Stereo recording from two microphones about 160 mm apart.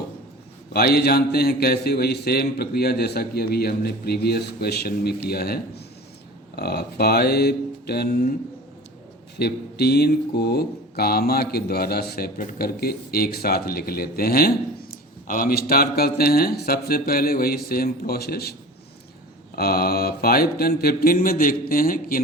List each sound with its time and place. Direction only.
0.7 s a man's voice: 75° left (ahead or behind)
9.4 s speech: 85° left
19.5 s speech: 70° left (ahead or behind)